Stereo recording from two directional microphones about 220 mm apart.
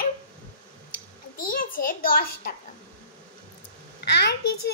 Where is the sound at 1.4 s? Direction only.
40° left (ahead or behind).